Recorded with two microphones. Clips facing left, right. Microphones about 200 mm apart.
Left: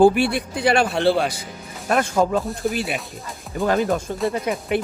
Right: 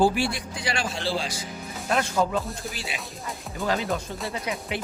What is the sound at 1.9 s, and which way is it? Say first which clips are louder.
Speech: left 5 dB; 50° left (ahead or behind).